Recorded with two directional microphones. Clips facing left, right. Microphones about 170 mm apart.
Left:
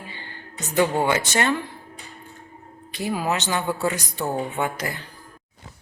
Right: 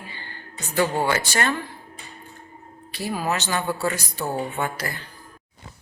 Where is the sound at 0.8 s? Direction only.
20° left (ahead or behind).